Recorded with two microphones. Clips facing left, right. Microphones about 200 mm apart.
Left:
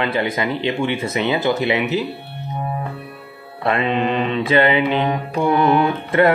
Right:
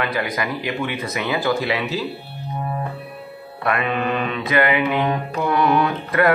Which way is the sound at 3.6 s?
25° left (ahead or behind).